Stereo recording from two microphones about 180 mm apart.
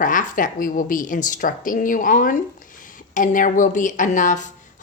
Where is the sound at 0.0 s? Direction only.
45° left (ahead or behind).